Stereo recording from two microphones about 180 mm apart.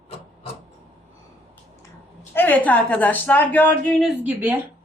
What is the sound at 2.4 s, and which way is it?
A woman's voice, 10° left (ahead or behind).